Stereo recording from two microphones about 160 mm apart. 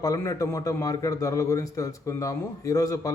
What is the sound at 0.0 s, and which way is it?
A man's voice, 20° left (ahead or behind).